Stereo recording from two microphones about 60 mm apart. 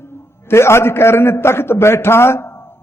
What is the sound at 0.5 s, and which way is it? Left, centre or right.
A man's voice, left.